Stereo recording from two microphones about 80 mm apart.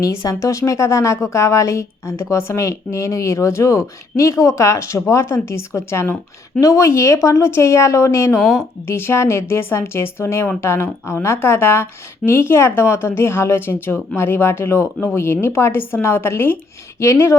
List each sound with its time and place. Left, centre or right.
0.0 s speech: left
8.4 s speech: centre
8.9 s a woman's voice: left